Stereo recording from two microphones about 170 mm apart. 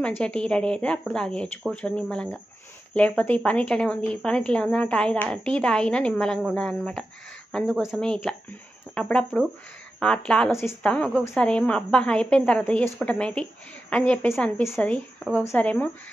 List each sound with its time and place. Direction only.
0.0 s a woman's voice: 5° left (ahead or behind)